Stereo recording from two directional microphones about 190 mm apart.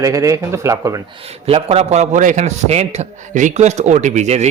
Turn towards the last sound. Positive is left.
turn(degrees=-35)  # may be behind; listen again after turning